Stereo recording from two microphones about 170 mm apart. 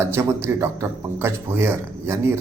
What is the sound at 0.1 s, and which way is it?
A man's voice, 15° right (ahead or behind).